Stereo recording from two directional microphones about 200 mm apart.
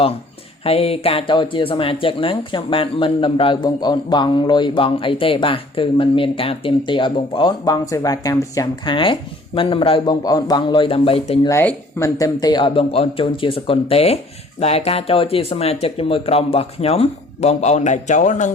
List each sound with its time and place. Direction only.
0.6 s speech: 30° left (ahead or behind)
11.4 s speech: 10° left (ahead or behind); by 18.5 s 40° left (ahead or behind)